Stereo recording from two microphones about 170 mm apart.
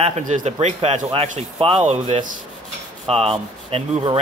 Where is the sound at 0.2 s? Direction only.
45° right (ahead or behind).